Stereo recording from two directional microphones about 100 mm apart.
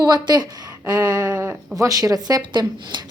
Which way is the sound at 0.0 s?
40° right (ahead or behind).